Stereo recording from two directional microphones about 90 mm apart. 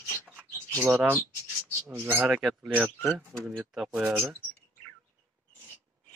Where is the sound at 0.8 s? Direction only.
25° right (ahead or behind).